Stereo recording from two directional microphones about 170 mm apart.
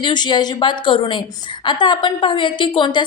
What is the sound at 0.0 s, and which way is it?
A woman's voice, 25° left (ahead or behind).